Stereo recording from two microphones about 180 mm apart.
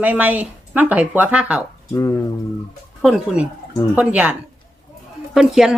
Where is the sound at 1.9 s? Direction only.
15° left (ahead or behind).